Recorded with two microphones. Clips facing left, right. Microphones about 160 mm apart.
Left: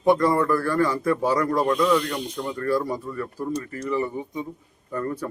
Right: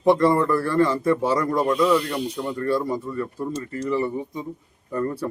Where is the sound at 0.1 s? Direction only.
30° right (ahead or behind).